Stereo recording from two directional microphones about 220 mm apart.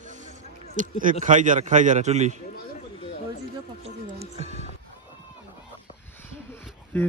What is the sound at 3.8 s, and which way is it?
Speech, 30° right (ahead or behind).